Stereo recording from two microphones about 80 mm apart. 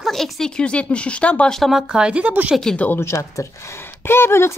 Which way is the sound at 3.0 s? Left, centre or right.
Left.